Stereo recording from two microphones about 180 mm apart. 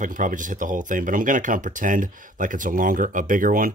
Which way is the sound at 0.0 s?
45° right (ahead or behind).